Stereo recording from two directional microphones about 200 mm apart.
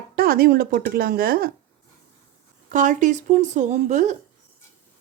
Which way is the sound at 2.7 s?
40° right (ahead or behind).